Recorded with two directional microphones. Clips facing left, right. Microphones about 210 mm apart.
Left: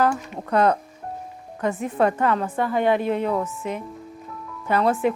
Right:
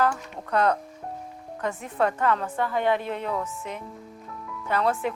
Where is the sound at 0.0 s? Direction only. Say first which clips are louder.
Left 3 dB; 10° left (ahead or behind).